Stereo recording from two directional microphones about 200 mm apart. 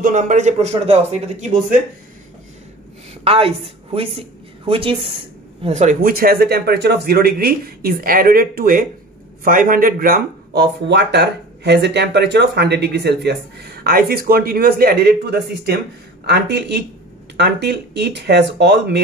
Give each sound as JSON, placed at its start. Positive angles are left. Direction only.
{"t": 0.0, "sound": "a man's voice", "side_deg": -40}
{"t": 3.3, "sound": "a woman's voice", "side_deg": -30}